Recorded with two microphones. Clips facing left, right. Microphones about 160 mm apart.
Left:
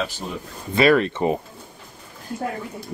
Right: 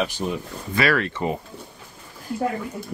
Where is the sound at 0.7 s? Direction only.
20° left (ahead or behind).